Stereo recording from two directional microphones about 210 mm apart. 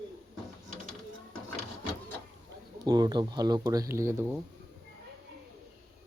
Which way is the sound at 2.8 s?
20° right (ahead or behind).